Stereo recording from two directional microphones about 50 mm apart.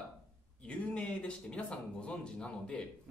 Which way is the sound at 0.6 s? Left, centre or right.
Left.